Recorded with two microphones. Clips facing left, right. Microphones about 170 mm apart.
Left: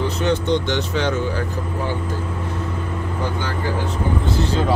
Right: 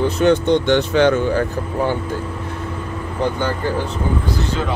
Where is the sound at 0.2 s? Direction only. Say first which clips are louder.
Right 5 dB; 55° right (ahead or behind).